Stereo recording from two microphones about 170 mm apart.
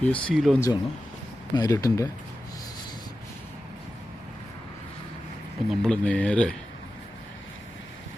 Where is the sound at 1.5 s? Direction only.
20° left (ahead or behind).